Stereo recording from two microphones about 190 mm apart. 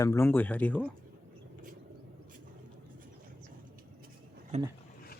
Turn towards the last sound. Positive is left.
turn(degrees=-35)  # may be behind; listen again after turning